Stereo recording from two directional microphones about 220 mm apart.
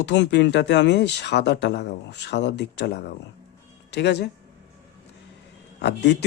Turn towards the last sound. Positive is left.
turn(degrees=50)  # may be behind; listen again after turning